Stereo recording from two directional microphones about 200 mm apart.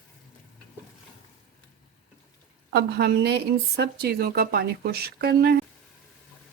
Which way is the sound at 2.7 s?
55° right (ahead or behind).